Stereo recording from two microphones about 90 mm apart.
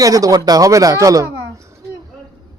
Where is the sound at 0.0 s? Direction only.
40° right (ahead or behind).